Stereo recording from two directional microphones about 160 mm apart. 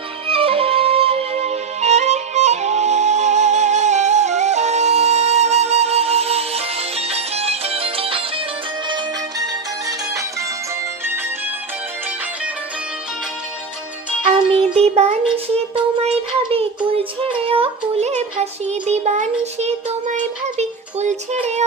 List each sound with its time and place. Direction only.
0.3 s music: 35° right (ahead or behind)
14.3 s music: 40° right (ahead or behind)
16.0 s child singing: 35° right (ahead or behind)